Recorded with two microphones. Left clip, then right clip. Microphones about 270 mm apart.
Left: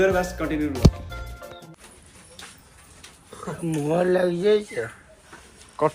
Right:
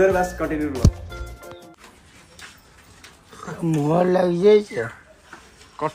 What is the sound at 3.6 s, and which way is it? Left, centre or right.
Speech, right.